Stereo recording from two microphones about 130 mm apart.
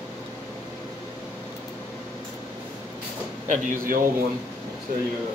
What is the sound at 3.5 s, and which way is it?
Speech, 90° right.